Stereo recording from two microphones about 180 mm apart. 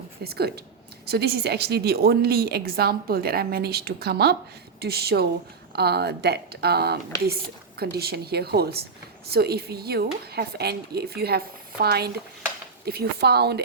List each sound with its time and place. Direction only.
0.2 s a woman's voice: 60° right (ahead or behind)